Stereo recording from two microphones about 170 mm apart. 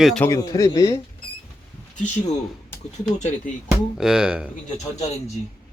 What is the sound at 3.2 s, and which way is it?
Speech, 45° left (ahead or behind).